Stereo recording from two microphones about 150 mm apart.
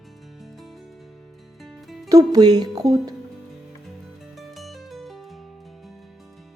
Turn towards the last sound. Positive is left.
turn(degrees=0)  # may be behind; listen again after turning